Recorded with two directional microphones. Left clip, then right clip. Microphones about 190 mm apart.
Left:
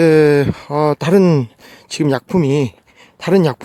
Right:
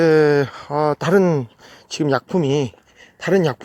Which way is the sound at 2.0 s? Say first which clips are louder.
Left 2 dB; 20° left (ahead or behind).